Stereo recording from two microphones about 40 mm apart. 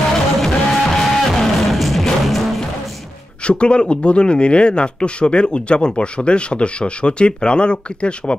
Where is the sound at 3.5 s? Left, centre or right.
Left.